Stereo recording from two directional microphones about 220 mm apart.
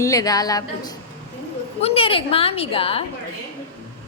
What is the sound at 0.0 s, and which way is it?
Speech, 15° left (ahead or behind).